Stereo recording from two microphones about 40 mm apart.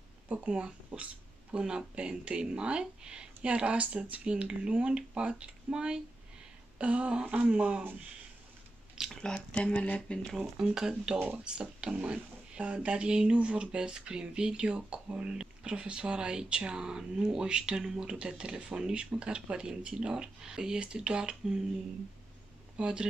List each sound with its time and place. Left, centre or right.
0.5 s speech: right
9.1 s a sound: centre
9.5 s speech: left
10.6 s speech: centre
22.8 s speech: right